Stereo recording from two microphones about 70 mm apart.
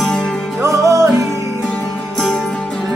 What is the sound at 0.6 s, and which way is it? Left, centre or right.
Music, right.